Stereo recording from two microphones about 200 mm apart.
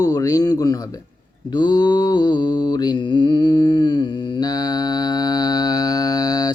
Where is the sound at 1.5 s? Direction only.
20° left (ahead or behind).